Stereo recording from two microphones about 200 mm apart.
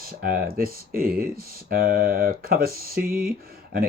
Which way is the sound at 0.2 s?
45° right (ahead or behind).